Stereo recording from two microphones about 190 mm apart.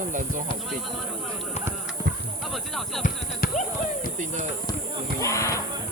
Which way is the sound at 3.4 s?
50° left (ahead or behind).